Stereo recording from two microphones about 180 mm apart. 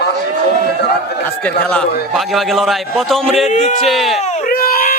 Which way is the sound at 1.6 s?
5° left (ahead or behind).